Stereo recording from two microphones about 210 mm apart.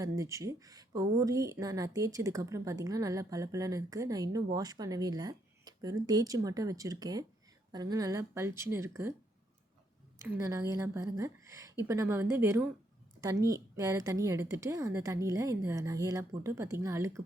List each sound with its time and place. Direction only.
0.0 s speech: 15° right (ahead or behind)
10.2 s speech: 15° right (ahead or behind)